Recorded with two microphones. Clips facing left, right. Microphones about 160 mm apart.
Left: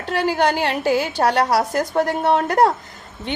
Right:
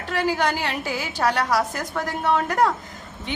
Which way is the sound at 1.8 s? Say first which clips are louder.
Left 7 dB; 30° left (ahead or behind).